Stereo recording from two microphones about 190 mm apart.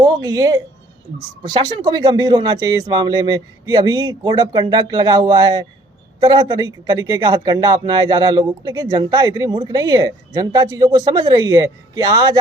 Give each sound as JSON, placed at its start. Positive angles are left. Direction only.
{"t": 0.0, "sound": "speech", "side_deg": -20}